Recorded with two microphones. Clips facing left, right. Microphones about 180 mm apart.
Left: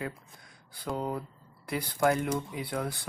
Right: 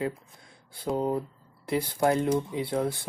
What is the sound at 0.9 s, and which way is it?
Speech, 25° right (ahead or behind).